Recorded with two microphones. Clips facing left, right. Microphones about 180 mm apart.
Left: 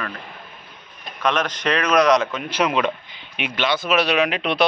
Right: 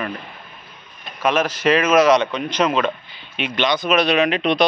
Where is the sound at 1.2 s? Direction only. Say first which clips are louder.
Right 4 dB; 5° right (ahead or behind).